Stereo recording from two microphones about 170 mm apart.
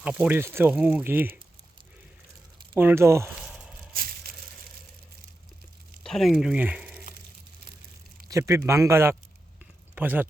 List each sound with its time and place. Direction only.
0.0 s speech: 5° right (ahead or behind)
2.7 s speech: 15° right (ahead or behind)
3.5 s a sound: 5° right (ahead or behind)
3.9 s crushing: 60° right (ahead or behind)
6.1 s speech: centre (ahead or behind)
8.3 s speech: 15° right (ahead or behind)